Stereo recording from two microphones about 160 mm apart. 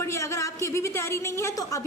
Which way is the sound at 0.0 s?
20° left (ahead or behind).